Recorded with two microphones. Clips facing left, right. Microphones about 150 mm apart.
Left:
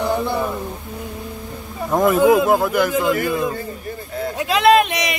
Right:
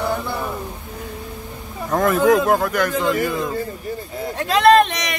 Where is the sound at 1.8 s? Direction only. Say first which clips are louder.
Left 2 dB; 10° left (ahead or behind).